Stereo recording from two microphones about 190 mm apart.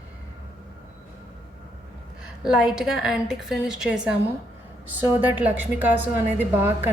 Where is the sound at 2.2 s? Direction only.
5° right (ahead or behind).